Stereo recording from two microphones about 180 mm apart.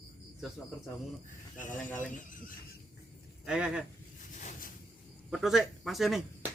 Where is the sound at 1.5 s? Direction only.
45° left (ahead or behind).